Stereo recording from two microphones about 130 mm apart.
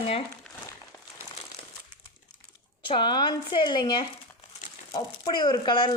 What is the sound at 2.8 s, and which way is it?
Speech, 40° left (ahead or behind).